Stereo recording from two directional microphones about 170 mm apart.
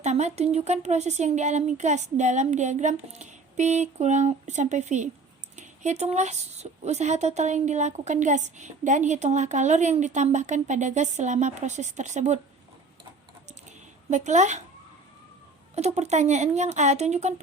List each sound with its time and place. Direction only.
0.0 s speech: 40° right (ahead or behind)
14.1 s speech: 45° right (ahead or behind)
16.0 s speech: 40° right (ahead or behind)